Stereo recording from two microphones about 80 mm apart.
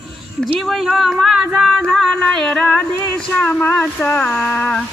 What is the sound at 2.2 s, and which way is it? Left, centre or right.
Speech, centre.